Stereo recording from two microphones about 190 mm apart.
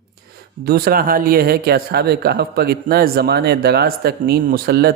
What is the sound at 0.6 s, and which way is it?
Speech, 55° right (ahead or behind).